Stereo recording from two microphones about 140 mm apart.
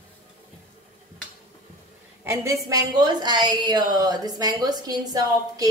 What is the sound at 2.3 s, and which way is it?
A woman's voice, 20° right (ahead or behind).